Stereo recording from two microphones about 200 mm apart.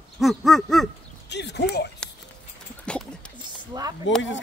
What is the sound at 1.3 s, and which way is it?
Speech, 55° left (ahead or behind).